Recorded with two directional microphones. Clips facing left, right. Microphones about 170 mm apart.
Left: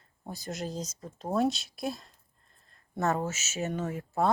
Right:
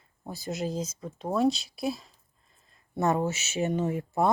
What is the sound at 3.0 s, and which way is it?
Speech, 15° right (ahead or behind).